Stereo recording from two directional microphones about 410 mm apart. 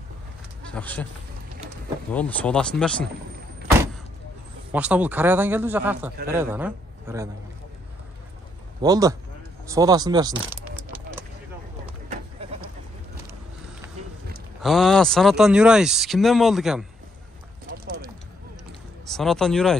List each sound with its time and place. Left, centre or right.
0.7 s speech: centre
2.1 s speech: centre
4.7 s a man's voice: centre
8.8 s speech: centre
14.6 s speech: centre
19.0 s speech: centre